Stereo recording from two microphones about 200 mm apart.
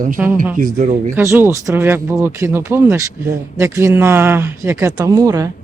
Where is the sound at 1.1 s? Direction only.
10° right (ahead or behind).